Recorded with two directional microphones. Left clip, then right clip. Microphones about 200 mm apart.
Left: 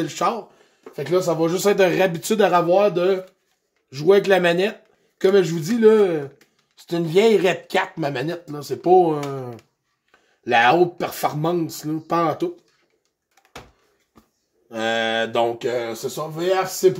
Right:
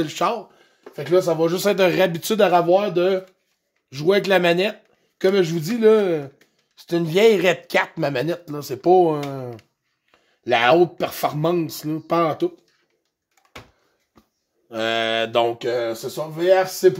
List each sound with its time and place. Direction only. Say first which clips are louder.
0.0 s speech: even; 40° right (ahead or behind)
14.7 s speech: even; 40° right (ahead or behind)